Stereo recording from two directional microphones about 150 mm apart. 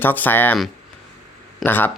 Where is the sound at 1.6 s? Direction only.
15° left (ahead or behind).